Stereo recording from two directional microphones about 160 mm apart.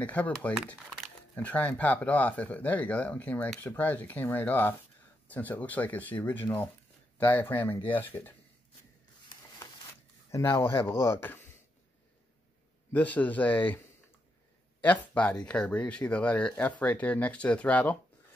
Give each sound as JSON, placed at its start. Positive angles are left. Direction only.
{"t": 0.0, "sound": "speech", "side_deg": 10}
{"t": 10.3, "sound": "speech", "side_deg": 15}
{"t": 12.9, "sound": "speech", "side_deg": 10}
{"t": 14.8, "sound": "speech", "side_deg": 10}